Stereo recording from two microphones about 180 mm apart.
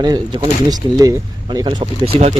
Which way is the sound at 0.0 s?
25° right (ahead or behind).